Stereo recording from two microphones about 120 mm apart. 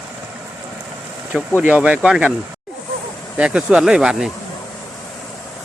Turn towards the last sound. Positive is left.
turn(degrees=-5)  # may be behind; listen again after turning